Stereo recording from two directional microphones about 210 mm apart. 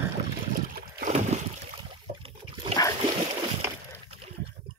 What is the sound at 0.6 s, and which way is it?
Boat, 45° right (ahead or behind).